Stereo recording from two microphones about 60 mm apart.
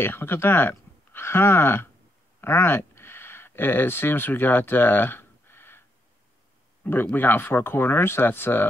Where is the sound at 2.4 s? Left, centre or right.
Left.